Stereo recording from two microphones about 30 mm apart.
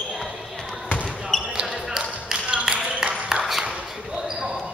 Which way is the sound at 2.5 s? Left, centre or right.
Right.